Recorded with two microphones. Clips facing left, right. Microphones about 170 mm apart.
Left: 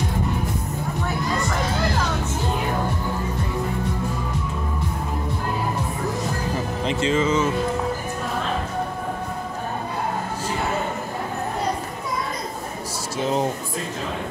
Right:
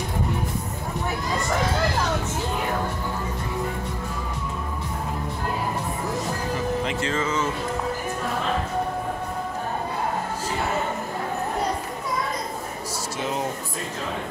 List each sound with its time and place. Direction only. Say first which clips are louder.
6.9 s music: left 5 dB; 20° left (ahead or behind)